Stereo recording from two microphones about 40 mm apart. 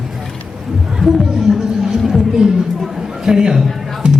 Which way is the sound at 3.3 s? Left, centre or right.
Centre.